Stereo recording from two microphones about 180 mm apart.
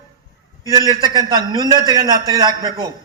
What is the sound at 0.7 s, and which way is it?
A man's voice, 20° right (ahead or behind).